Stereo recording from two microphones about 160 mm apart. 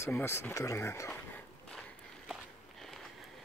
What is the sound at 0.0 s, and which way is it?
Speech, 15° left (ahead or behind).